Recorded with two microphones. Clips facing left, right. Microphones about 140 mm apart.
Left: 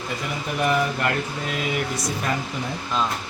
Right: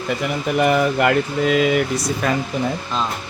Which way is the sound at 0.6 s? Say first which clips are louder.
Right 5 dB; 90° right.